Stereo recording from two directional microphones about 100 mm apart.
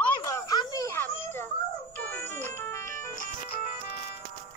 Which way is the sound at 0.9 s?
25° left (ahead or behind).